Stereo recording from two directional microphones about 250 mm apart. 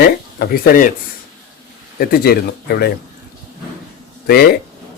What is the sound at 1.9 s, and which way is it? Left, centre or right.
Speech, left.